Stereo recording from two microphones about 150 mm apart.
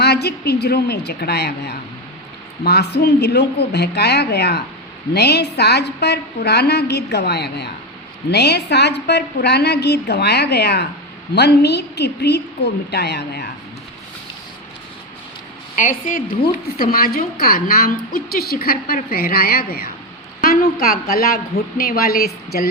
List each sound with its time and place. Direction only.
0.0 s a woman's voice: 90° left
15.7 s a woman's voice: 60° left (ahead or behind)
16.4 s a woman's voice: 70° left (ahead or behind); by 19.9 s 90° left
20.4 s a woman's voice: 75° left (ahead or behind)